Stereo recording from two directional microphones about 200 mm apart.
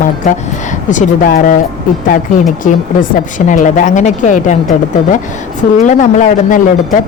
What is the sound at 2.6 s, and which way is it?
A woman's voice, 40° left (ahead or behind).